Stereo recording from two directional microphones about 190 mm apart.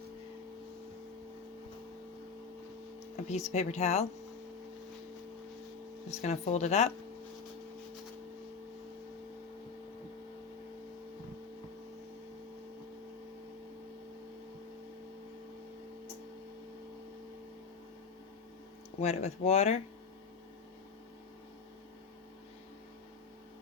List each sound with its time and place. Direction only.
3.2 s speech: 35° left (ahead or behind)
6.1 s speech: 35° left (ahead or behind)
18.9 s speech: 35° left (ahead or behind)